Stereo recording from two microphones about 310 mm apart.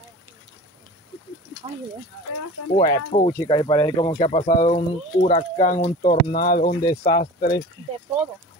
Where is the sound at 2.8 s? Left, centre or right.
Centre.